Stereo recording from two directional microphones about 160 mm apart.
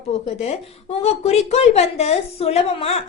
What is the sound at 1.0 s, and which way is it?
A woman's voice, 40° left (ahead or behind).